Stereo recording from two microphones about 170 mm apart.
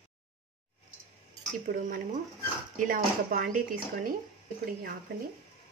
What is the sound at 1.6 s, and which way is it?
Speech, 50° right (ahead or behind).